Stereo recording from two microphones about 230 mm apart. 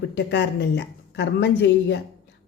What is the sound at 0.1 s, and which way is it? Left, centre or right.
A woman's voice, left.